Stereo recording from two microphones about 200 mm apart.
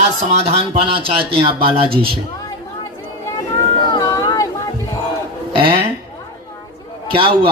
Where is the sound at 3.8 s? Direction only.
20° left (ahead or behind).